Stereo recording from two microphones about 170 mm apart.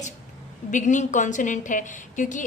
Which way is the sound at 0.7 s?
45° left (ahead or behind).